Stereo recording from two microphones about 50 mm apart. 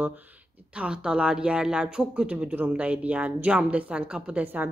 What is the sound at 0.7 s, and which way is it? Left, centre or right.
A woman's voice, right.